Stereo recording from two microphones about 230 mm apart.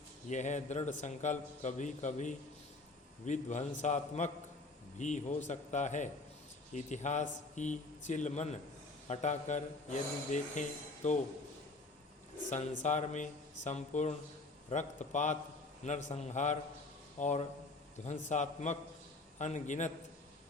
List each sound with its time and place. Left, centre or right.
0.3 s speech: left
12.8 s speech: left